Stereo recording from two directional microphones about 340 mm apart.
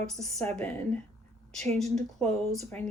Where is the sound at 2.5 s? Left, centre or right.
Centre.